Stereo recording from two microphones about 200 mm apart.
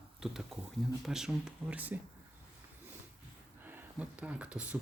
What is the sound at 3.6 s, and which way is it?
Speech, 10° right (ahead or behind).